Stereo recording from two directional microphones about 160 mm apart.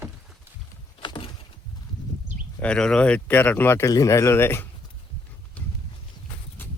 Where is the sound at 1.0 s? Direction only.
30° left (ahead or behind).